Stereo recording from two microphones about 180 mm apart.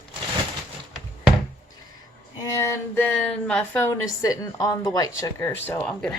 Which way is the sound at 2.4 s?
15° left (ahead or behind).